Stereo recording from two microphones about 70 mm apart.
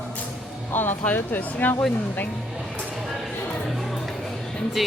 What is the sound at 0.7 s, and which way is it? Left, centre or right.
Speech, left.